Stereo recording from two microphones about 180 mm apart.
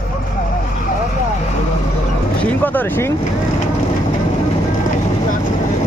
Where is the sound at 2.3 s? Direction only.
10° left (ahead or behind).